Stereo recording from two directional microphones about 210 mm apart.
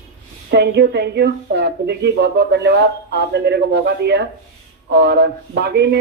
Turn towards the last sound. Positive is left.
turn(degrees=-50)  # may be behind; listen again after turning